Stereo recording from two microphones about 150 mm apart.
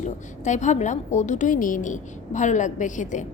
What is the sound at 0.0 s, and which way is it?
A woman's voice, 55° left (ahead or behind).